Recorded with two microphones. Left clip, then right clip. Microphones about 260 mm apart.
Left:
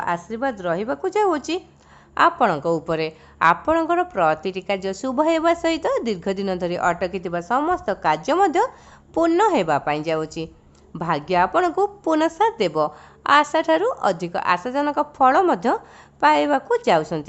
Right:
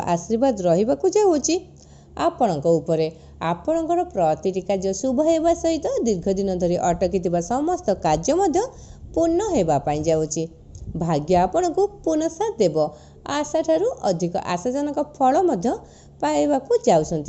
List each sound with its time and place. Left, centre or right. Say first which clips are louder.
0.0 s a woman's voice: right 3 dB; centre